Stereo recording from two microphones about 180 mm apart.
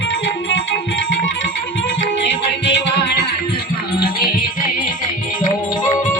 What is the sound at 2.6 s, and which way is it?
Music, 80° left.